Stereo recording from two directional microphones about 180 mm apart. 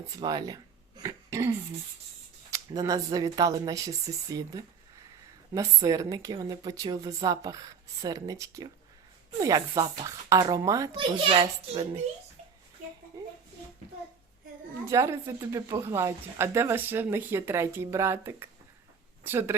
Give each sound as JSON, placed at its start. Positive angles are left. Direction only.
{"t": 0.1, "sound": "a woman's voice", "side_deg": -20}
{"t": 1.0, "sound": "a sound", "side_deg": -15}
{"t": 2.5, "sound": "a woman's voice", "side_deg": -20}
{"t": 14.8, "sound": "speech", "side_deg": -15}